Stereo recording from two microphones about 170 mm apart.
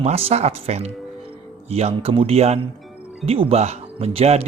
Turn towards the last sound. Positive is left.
turn(degrees=-35)  # may be behind; listen again after turning